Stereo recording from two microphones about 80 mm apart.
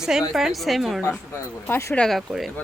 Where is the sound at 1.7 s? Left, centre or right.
Left.